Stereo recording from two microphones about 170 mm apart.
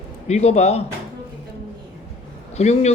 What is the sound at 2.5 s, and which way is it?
Speech, 40° left (ahead or behind).